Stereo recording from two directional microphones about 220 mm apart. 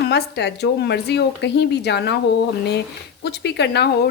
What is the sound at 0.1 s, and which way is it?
A woman's voice, 50° left (ahead or behind).